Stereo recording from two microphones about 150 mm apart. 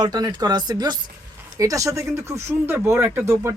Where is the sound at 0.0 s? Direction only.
25° right (ahead or behind).